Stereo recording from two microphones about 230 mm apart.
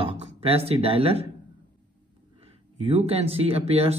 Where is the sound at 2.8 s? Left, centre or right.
Right.